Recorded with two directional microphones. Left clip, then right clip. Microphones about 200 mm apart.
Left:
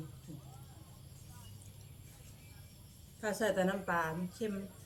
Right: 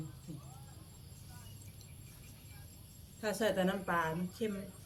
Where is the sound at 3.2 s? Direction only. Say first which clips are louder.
Even; 5° left (ahead or behind).